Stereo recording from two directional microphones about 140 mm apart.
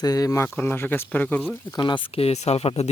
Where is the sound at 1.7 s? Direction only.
25° left (ahead or behind).